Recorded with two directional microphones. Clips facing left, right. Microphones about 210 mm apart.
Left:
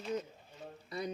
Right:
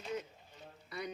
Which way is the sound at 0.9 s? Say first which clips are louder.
Left 3 dB; 35° left (ahead or behind).